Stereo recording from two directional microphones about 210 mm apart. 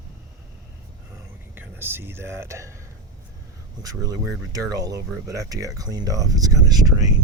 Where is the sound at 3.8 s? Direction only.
15° right (ahead or behind).